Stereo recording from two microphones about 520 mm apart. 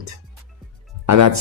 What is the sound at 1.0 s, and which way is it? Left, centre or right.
Speech, right.